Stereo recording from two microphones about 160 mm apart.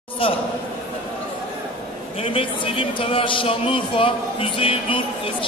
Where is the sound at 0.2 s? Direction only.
35° left (ahead or behind).